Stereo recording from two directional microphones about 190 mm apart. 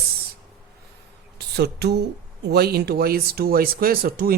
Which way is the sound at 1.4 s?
60° right (ahead or behind).